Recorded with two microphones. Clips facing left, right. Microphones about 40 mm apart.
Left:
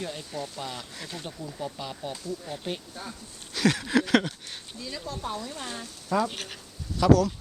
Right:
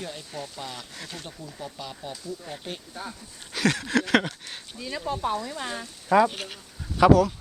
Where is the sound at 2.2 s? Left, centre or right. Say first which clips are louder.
Left 2 dB; centre.